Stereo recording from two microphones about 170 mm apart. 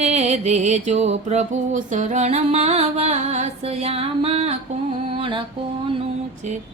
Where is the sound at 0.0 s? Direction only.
40° right (ahead or behind).